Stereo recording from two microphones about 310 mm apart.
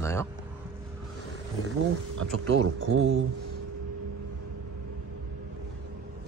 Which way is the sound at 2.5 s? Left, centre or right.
Right.